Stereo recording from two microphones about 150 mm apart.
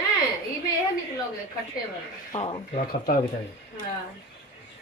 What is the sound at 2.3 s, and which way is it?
Speech, 35° left (ahead or behind).